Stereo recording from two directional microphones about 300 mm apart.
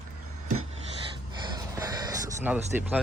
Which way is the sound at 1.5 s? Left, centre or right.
Centre.